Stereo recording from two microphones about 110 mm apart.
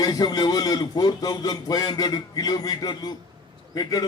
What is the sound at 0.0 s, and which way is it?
A man's voice, 35° left (ahead or behind).